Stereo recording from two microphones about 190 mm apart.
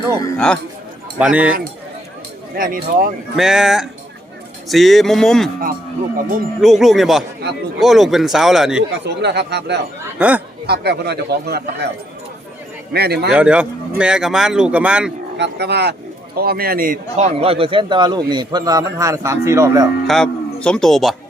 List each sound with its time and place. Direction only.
0.3 s speech: 5° left (ahead or behind)
1.2 s speech: 5° right (ahead or behind)
2.6 s speech: 50° right (ahead or behind)
3.3 s speech: 5° right (ahead or behind)
6.6 s speech: centre (ahead or behind)
9.0 s speech: 60° right (ahead or behind)
10.2 s speech: 5° right (ahead or behind)
10.7 s speech: 60° right (ahead or behind)
12.9 s speech: 55° right (ahead or behind)
13.3 s speech: 5° right (ahead or behind)
15.4 s a man's voice: 60° right (ahead or behind); by 19.9 s 15° right (ahead or behind)
20.1 s a man's voice: 5° left (ahead or behind)